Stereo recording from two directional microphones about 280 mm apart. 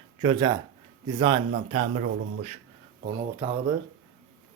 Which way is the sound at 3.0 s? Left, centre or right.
Centre.